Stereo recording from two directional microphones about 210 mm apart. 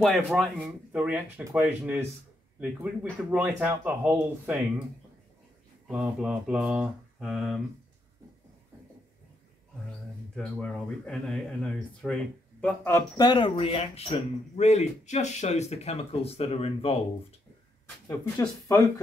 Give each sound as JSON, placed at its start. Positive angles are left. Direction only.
{"t": 0.0, "sound": "speech", "side_deg": 0}
{"t": 5.9, "sound": "speech", "side_deg": -5}
{"t": 10.3, "sound": "speech", "side_deg": 5}